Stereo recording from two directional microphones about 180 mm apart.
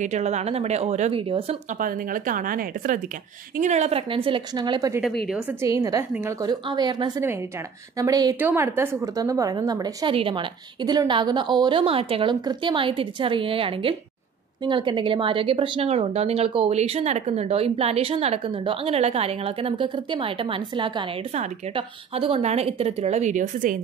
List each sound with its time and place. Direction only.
0.0 s a woman's voice: 40° right (ahead or behind)
1.8 s a woman's voice: 50° right (ahead or behind)